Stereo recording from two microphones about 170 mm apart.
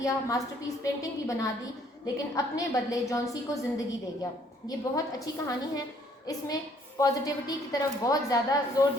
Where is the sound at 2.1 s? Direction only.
20° left (ahead or behind).